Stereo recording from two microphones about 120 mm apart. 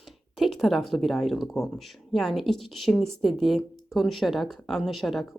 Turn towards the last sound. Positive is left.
turn(degrees=0)  # may be behind; listen again after turning